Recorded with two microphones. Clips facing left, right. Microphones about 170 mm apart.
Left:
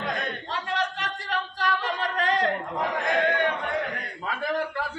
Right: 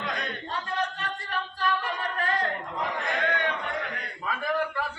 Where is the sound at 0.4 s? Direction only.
80° left.